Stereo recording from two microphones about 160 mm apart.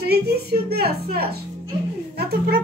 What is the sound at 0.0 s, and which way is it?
A woman's voice, 80° right.